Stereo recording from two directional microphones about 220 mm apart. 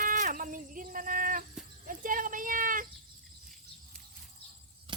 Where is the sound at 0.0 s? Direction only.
35° right (ahead or behind).